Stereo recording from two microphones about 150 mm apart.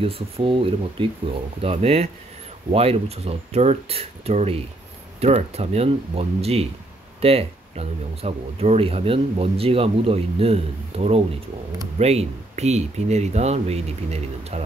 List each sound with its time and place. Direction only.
0.0 s speech: 35° right (ahead or behind)